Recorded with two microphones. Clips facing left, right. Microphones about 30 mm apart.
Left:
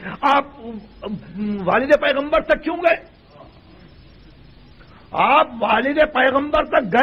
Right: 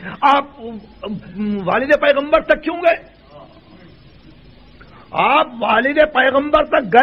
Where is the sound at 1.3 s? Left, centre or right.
Centre.